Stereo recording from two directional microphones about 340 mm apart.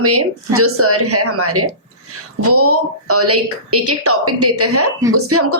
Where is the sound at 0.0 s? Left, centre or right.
Right.